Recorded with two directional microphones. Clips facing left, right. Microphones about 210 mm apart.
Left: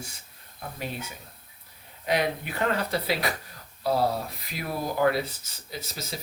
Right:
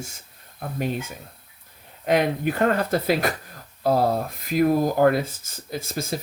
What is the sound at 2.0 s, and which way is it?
Speech, 50° right (ahead or behind).